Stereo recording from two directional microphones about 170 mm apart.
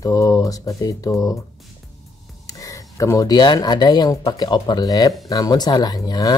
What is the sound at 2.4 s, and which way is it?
Speech, 20° left (ahead or behind).